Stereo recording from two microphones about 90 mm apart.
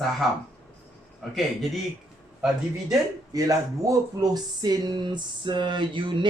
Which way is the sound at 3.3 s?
40° right (ahead or behind).